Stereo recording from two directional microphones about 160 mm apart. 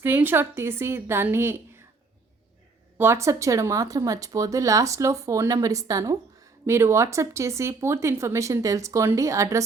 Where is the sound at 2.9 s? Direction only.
15° right (ahead or behind).